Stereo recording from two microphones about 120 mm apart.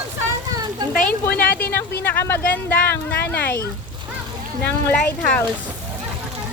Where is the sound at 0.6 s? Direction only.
35° right (ahead or behind).